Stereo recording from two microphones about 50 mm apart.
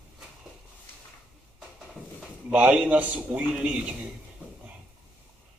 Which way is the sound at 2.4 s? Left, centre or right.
Right.